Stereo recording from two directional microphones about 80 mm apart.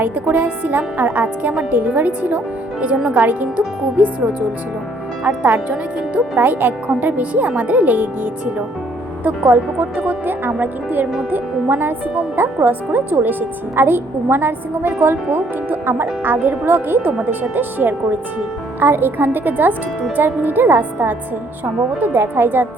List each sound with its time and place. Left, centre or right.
0.0 s speech: right
3.2 s speech: right
17.0 s speech: centre